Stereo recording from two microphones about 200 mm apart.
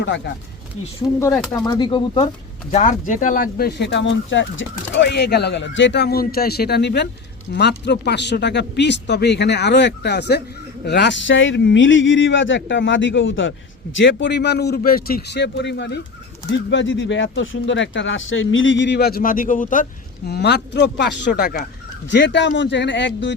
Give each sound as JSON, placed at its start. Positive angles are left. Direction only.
{"t": 0.0, "sound": "speech", "side_deg": 65}
{"t": 1.2, "sound": "speech", "side_deg": 15}
{"t": 2.7, "sound": "speech", "side_deg": 40}